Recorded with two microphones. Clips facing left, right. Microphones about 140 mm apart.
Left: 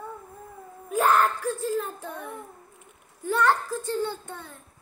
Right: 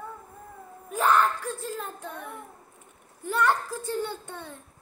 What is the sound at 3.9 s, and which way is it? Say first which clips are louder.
Speech: left 2 dB; 15° right (ahead or behind).